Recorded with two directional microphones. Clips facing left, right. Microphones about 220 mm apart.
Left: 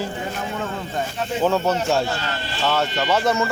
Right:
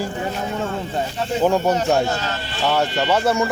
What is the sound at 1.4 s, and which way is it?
Speech, 15° right (ahead or behind).